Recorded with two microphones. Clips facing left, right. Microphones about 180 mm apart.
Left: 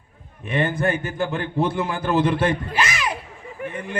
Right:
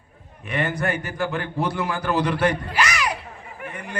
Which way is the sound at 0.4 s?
25° left (ahead or behind).